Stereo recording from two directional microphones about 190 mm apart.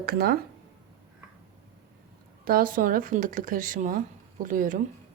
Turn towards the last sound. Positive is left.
turn(degrees=-45)  # may be behind; listen again after turning